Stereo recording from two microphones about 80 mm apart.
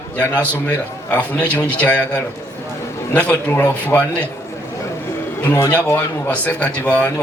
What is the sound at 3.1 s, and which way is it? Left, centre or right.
Speech, centre.